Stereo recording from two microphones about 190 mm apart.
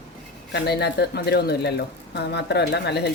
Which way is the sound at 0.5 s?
60° left (ahead or behind).